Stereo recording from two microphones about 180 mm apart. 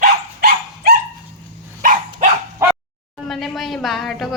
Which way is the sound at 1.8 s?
45° right (ahead or behind).